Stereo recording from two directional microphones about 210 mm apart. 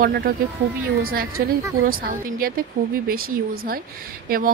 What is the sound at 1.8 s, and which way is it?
A woman's voice, 45° right (ahead or behind).